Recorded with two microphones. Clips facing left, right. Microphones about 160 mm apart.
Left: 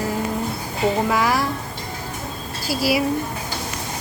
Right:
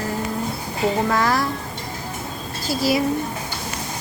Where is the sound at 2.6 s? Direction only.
10° left (ahead or behind).